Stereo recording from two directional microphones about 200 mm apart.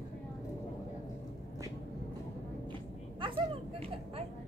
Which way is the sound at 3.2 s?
25° right (ahead or behind).